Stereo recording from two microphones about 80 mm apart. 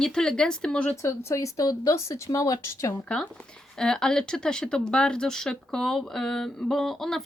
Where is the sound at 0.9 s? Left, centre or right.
Left.